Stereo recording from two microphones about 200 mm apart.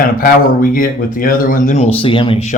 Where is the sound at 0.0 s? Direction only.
45° left (ahead or behind).